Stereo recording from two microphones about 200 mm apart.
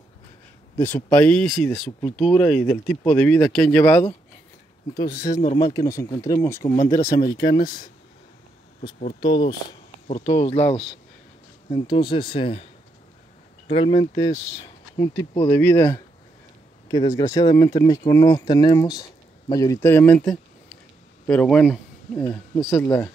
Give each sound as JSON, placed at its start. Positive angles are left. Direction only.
{"t": 0.7, "sound": "speech", "side_deg": 10}
{"t": 5.2, "sound": "speech", "side_deg": 20}
{"t": 9.2, "sound": "speech", "side_deg": 20}
{"t": 13.7, "sound": "speech", "side_deg": 25}
{"t": 15.5, "sound": "speech", "side_deg": 10}
{"t": 16.9, "sound": "speech", "side_deg": 15}